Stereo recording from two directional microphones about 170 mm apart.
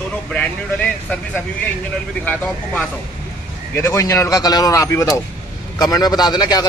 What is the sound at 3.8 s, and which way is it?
A man's voice, 15° left (ahead or behind).